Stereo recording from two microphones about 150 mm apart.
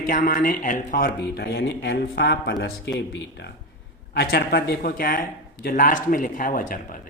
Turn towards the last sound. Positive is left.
turn(degrees=65)  # may be behind; listen again after turning